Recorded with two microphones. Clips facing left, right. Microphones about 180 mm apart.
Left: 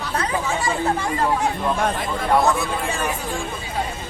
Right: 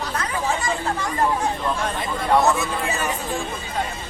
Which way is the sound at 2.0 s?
Centre (ahead or behind).